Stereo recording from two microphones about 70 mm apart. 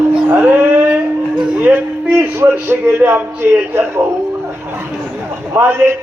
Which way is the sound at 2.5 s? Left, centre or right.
Right.